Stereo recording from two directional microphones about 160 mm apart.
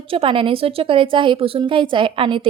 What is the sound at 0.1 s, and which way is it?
A woman's voice, 35° right (ahead or behind).